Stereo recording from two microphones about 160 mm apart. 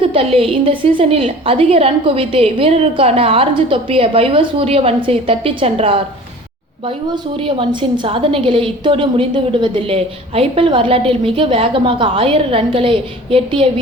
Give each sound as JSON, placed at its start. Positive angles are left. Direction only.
{"t": 0.0, "sound": "a woman's voice", "side_deg": -35}